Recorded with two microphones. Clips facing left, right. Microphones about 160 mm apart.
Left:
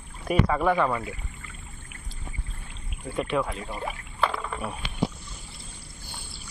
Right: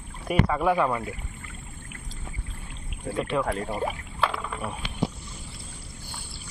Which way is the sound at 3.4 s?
60° right (ahead or behind).